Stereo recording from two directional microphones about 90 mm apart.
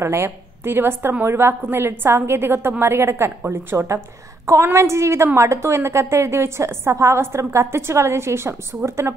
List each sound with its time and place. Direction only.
0.0 s a woman's voice: 30° right (ahead or behind)